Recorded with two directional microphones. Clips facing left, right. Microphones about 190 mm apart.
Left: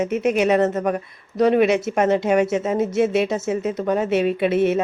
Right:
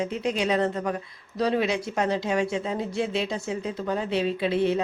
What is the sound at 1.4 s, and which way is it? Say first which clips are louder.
Speech: left 8 dB; 55° left (ahead or behind).